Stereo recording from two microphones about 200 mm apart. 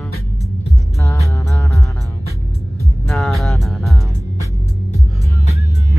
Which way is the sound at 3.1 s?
Centre (ahead or behind).